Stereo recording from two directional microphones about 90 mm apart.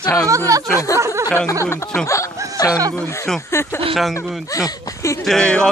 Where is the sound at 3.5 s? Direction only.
30° left (ahead or behind).